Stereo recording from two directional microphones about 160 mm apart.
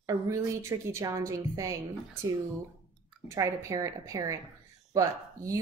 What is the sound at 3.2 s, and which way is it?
Speech, 20° right (ahead or behind).